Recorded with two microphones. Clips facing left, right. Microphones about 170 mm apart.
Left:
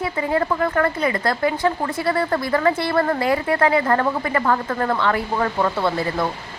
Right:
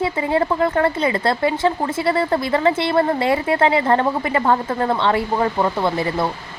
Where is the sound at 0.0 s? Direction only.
25° right (ahead or behind).